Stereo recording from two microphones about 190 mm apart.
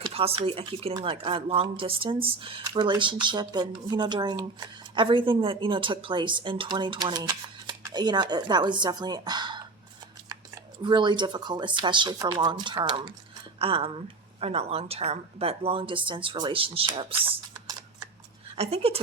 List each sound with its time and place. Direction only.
0.0 s speech: 30° right (ahead or behind)